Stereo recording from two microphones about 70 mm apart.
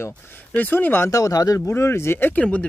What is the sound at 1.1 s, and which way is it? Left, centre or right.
Speech, left.